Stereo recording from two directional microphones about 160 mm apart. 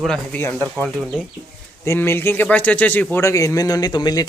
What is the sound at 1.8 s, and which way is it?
Speech, 15° left (ahead or behind).